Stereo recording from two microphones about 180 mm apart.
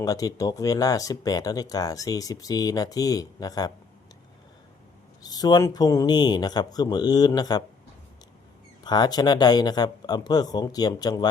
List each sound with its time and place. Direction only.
0.0 s speech: 20° left (ahead or behind)
5.2 s speech: 20° left (ahead or behind)
8.8 s speech: 25° left (ahead or behind)